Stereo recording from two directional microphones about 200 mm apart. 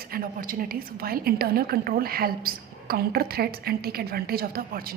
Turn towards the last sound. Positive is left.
turn(degrees=-50)  # may be behind; listen again after turning